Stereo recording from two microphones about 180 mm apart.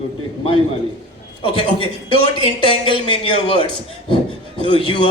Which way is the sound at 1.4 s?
30° left (ahead or behind).